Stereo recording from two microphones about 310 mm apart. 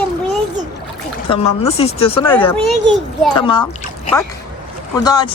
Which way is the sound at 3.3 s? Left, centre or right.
Centre.